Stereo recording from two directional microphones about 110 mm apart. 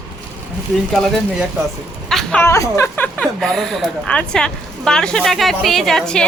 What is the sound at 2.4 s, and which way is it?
Speech, 25° left (ahead or behind).